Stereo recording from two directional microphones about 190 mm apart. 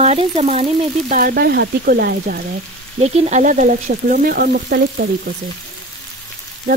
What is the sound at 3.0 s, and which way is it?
Speech, 35° right (ahead or behind).